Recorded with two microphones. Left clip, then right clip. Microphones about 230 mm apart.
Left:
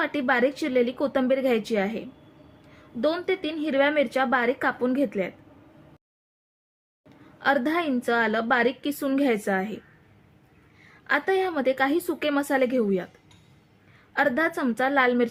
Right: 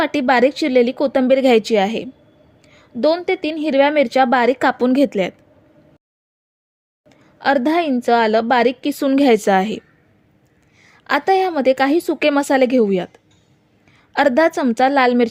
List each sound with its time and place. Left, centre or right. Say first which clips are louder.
0.0 s a woman's voice: right 8 dB; right
7.3 s a woman's voice: right 7 dB; right
10.8 s a woman's voice: right 8 dB; right
14.1 s a woman's voice: right 9 dB; right